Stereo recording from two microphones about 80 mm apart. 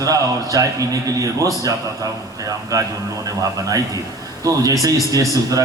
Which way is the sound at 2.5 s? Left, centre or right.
Right.